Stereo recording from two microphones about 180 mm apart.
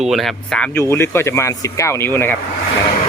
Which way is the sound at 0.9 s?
15° left (ahead or behind).